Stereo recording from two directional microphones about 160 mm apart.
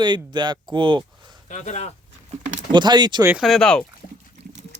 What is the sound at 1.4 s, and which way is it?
Speech, 50° left (ahead or behind).